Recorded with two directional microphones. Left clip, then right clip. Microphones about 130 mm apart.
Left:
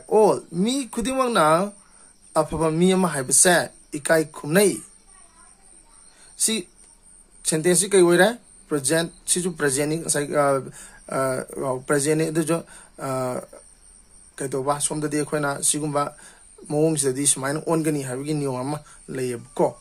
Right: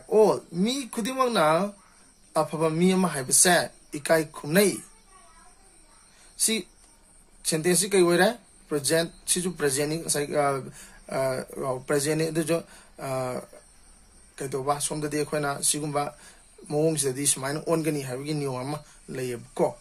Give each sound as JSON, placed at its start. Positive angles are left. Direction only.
{"t": 0.1, "sound": "speech", "side_deg": 60}
{"t": 6.3, "sound": "speech", "side_deg": 55}